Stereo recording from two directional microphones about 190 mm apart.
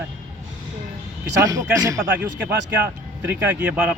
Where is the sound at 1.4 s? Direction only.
20° right (ahead or behind).